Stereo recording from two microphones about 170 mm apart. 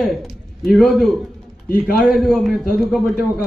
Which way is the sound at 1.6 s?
60° left (ahead or behind).